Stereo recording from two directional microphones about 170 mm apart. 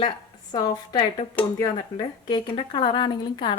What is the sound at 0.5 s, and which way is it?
A woman's voice, 30° left (ahead or behind).